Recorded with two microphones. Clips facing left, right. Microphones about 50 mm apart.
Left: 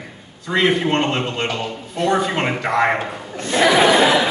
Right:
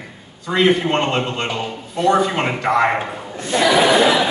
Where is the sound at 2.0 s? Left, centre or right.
Centre.